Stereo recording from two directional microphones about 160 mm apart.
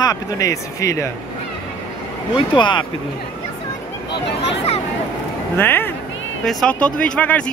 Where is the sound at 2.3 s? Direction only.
30° left (ahead or behind).